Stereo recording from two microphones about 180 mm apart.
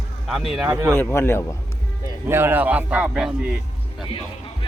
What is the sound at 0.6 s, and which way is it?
Speech, 15° right (ahead or behind).